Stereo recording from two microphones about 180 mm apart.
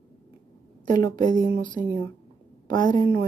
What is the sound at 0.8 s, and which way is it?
Speech, 45° right (ahead or behind).